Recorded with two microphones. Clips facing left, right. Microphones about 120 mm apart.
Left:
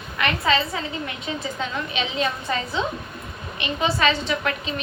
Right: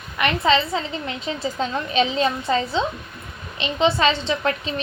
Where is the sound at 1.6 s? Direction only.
35° right (ahead or behind).